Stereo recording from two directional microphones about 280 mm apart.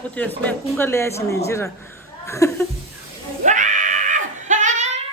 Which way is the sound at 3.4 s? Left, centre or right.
Right.